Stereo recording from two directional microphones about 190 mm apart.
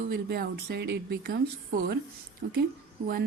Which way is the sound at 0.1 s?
55° right (ahead or behind).